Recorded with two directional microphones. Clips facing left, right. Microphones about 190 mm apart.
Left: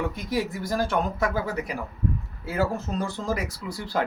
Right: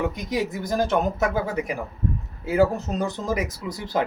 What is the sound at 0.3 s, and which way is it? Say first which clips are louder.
Speech: right 2 dB; 20° right (ahead or behind).